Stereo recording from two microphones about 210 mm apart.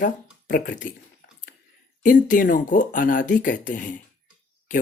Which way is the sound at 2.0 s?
40° left (ahead or behind).